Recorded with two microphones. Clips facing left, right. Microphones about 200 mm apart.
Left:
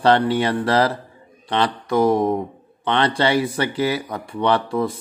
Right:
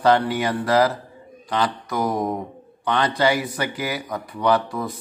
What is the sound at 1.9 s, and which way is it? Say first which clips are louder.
Speech: left 6 dB; 25° left (ahead or behind).